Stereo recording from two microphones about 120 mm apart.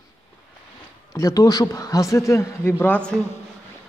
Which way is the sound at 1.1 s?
30° left (ahead or behind).